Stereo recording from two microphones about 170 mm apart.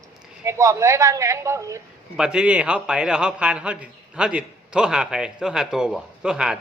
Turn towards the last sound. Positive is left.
turn(degrees=-5)  # may be behind; listen again after turning